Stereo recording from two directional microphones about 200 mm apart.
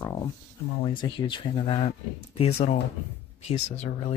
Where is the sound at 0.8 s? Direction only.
25° left (ahead or behind).